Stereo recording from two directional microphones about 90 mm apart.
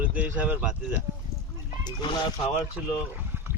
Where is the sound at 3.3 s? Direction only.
25° right (ahead or behind).